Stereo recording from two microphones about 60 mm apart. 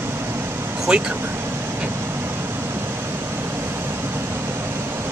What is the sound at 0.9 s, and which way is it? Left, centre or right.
Speech, centre.